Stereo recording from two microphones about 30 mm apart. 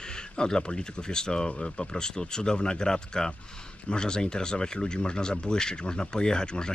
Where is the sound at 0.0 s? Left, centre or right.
Left.